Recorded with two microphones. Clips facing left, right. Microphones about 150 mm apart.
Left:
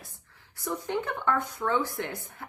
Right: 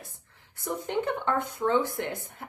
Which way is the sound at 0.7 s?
20° right (ahead or behind).